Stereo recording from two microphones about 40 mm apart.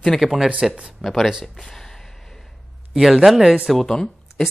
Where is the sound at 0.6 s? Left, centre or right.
Right.